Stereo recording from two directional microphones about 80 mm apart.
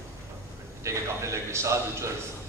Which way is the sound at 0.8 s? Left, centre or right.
Right.